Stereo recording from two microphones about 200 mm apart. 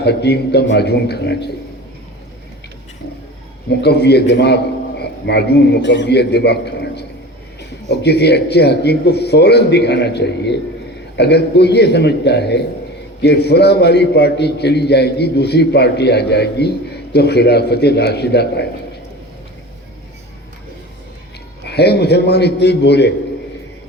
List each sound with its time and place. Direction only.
0.0 s a man's voice: 55° left (ahead or behind)
3.8 s a man's voice: 55° left (ahead or behind)
21.7 s a man's voice: 55° left (ahead or behind)